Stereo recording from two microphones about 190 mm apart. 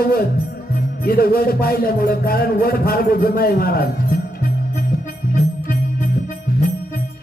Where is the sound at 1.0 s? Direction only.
50° left (ahead or behind).